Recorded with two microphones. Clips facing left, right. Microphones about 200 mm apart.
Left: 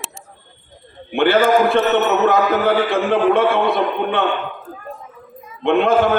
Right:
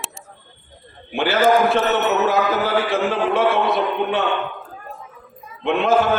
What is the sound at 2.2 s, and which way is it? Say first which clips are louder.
A man's voice: left 3 dB; 55° left (ahead or behind).